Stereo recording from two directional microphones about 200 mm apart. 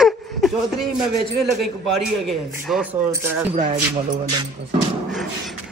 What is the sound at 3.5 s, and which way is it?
Speech, 40° right (ahead or behind).